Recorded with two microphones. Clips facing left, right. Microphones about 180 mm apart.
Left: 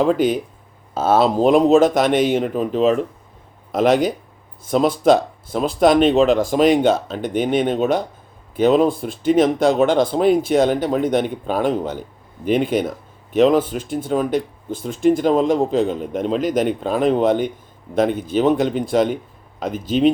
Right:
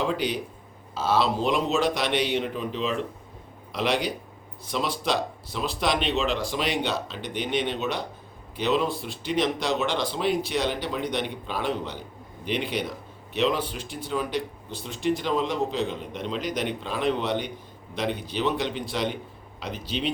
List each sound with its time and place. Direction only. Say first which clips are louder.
0.0 s speech: left 10 dB; 45° left (ahead or behind)